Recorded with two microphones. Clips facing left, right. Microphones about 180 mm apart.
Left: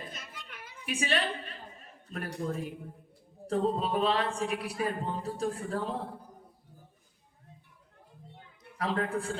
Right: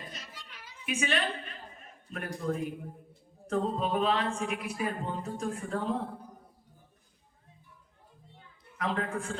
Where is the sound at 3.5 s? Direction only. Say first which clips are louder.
Left 1 dB; 35° left (ahead or behind).